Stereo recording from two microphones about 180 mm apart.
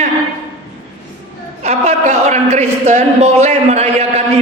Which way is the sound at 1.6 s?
40° right (ahead or behind).